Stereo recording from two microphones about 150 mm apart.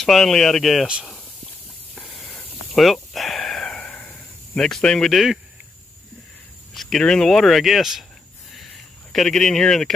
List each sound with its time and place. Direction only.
0.0 s speech: 5° left (ahead or behind)
2.0 s snake: 5° left (ahead or behind)
6.7 s speech: centre (ahead or behind)
8.5 s a sound: centre (ahead or behind)